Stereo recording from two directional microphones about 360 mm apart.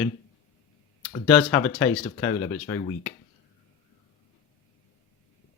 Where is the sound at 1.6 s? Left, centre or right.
Centre.